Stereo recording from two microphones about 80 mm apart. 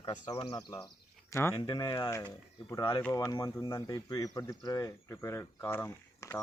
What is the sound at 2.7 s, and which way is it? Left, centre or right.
Speech, left.